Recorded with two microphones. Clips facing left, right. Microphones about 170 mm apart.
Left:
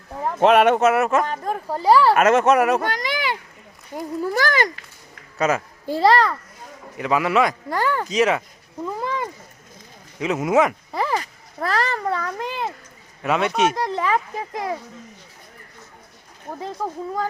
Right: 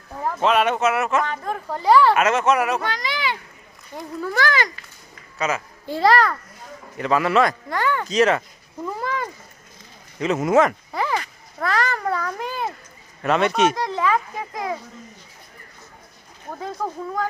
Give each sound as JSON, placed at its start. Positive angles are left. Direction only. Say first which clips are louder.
{"t": 0.3, "sound": "a child's voice", "louder": "left 5 dB", "side_deg": 55}
{"t": 2.2, "sound": "a child's voice", "louder": "left 3 dB", "side_deg": 50}
{"t": 6.9, "sound": "a man's voice", "louder": "right 1 dB", "side_deg": 10}
{"t": 7.7, "sound": "a child's voice", "louder": "left 1 dB", "side_deg": 35}
{"t": 8.0, "sound": "speech", "louder": "right 1 dB", "side_deg": 10}
{"t": 9.0, "sound": "speech", "louder": "even", "side_deg": 25}
{"t": 10.2, "sound": "speech", "louder": "right 1 dB", "side_deg": 10}
{"t": 11.2, "sound": "a child's voice", "louder": "even", "side_deg": 35}
{"t": 13.2, "sound": "speech", "louder": "right 1 dB", "side_deg": 5}
{"t": 13.9, "sound": "a child's voice", "louder": "even", "side_deg": 35}
{"t": 16.6, "sound": "speech", "louder": "even", "side_deg": 5}